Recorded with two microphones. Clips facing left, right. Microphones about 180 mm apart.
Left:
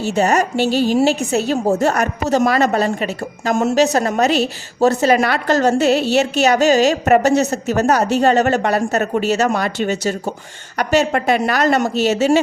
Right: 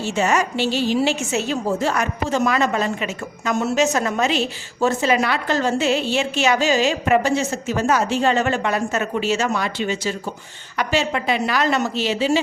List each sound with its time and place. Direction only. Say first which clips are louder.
0.0 s a woman's voice: left 4 dB; 40° left (ahead or behind)